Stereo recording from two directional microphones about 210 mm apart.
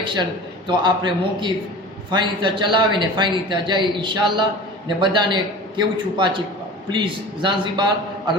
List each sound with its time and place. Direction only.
0.0 s a man's voice: 20° right (ahead or behind)